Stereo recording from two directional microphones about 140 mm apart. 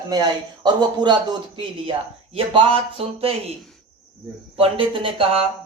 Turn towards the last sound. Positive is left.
turn(degrees=-40)  # may be behind; listen again after turning